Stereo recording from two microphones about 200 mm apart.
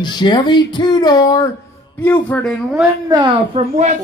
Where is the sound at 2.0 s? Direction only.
10° left (ahead or behind).